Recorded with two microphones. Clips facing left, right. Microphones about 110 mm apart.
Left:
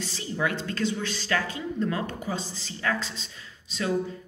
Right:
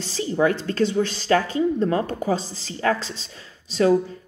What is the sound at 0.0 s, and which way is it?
Speech, 35° right (ahead or behind).